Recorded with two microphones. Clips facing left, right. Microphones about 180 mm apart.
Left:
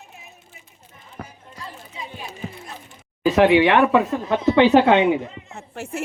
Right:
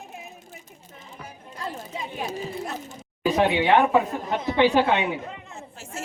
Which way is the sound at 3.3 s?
70° left (ahead or behind).